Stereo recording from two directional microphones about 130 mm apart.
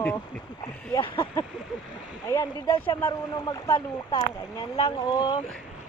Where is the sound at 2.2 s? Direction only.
25° left (ahead or behind).